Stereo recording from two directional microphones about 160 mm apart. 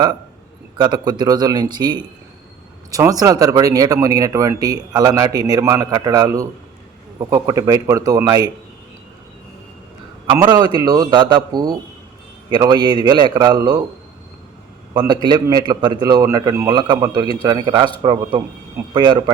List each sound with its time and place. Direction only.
0.8 s speech: 25° right (ahead or behind)
10.3 s speech: 25° right (ahead or behind)
14.9 s speech: 25° right (ahead or behind)